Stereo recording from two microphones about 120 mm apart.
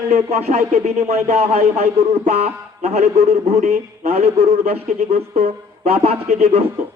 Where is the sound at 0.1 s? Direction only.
65° right (ahead or behind).